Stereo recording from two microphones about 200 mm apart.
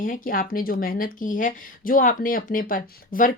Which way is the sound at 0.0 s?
45° left (ahead or behind).